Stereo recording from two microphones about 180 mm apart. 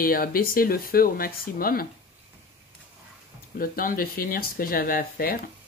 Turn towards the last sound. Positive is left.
turn(degrees=55)  # may be behind; listen again after turning